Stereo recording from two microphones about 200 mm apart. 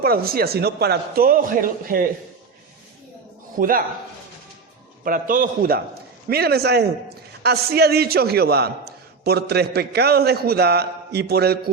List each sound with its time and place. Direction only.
0.0 s a man's voice: 50° right (ahead or behind)
3.6 s a man's voice: 45° right (ahead or behind)
5.0 s a man's voice: 45° right (ahead or behind)